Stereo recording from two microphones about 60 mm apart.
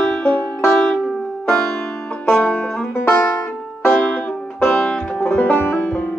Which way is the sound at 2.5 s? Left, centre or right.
Centre.